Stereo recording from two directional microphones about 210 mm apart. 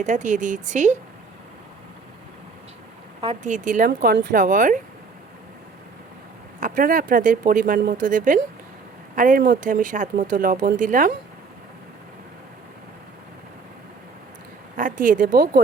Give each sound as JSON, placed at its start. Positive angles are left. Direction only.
{"t": 0.0, "sound": "speech", "side_deg": -35}
{"t": 3.2, "sound": "speech", "side_deg": -30}
{"t": 6.6, "sound": "speech", "side_deg": -40}
{"t": 14.8, "sound": "speech", "side_deg": -40}